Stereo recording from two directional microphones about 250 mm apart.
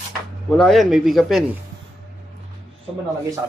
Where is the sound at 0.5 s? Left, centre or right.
Centre.